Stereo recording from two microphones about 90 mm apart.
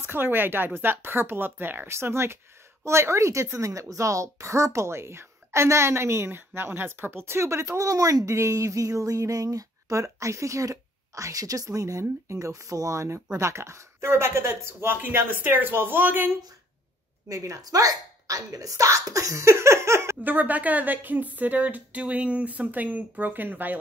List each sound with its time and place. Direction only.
0.0 s a woman's voice: 25° right (ahead or behind)
17.3 s a woman's voice: 40° right (ahead or behind); by 23.8 s 20° right (ahead or behind)